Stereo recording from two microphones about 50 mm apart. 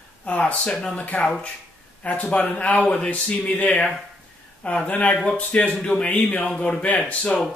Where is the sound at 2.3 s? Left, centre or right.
Left.